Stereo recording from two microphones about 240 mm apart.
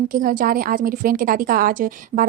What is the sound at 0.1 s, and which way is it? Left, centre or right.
A woman's voice, right.